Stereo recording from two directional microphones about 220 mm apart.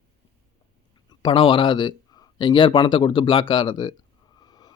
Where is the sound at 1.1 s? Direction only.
20° left (ahead or behind).